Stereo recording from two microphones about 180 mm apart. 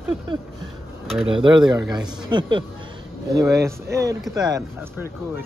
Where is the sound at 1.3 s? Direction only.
25° right (ahead or behind).